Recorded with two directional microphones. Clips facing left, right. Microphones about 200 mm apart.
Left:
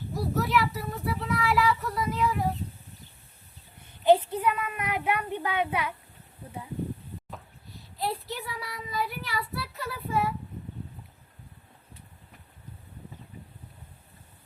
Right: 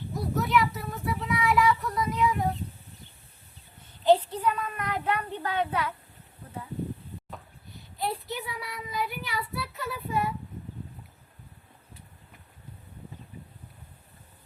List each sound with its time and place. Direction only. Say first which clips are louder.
0.1 s speech: even; centre (ahead or behind)
4.0 s a child's voice: left 1 dB; 10° left (ahead or behind)
7.3 s a sound: even; centre (ahead or behind)
8.4 s speech: even; centre (ahead or behind)